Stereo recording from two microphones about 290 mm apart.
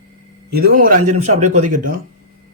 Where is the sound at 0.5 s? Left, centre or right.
Right.